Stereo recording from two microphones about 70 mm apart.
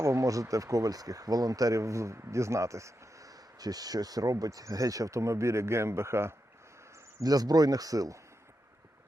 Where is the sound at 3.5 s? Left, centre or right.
Right.